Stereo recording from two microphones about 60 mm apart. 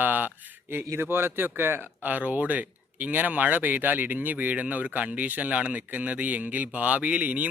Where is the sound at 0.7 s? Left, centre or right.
Right.